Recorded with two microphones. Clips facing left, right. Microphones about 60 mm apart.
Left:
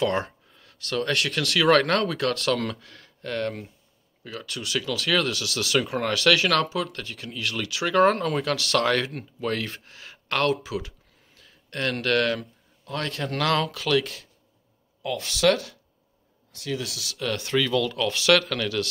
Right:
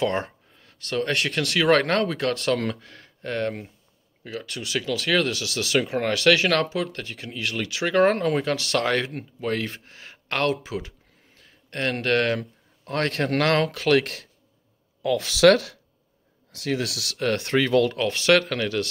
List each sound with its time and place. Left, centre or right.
0.0 s speech: right
1.5 s speech: centre
2.5 s speech: centre
2.8 s speech: right
7.8 s speech: centre
9.8 s speech: right
12.4 s speech: right
13.5 s speech: right
14.0 s speech: right
15.0 s speech: right
16.5 s speech: right
17.2 s speech: right
17.9 s speech: right